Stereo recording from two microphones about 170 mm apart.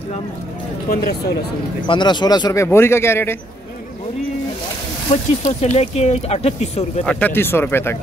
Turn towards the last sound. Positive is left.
turn(degrees=15)  # may be behind; listen again after turning